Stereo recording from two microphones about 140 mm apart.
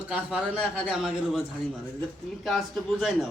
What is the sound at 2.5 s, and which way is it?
Speech, centre (ahead or behind).